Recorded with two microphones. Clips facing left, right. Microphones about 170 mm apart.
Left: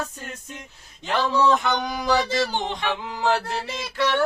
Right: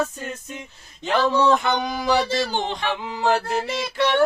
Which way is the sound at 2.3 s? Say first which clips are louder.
Even; 15° left (ahead or behind).